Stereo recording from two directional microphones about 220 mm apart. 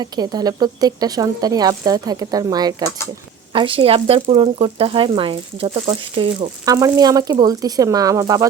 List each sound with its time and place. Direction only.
0.0 s a woman's voice: 20° right (ahead or behind)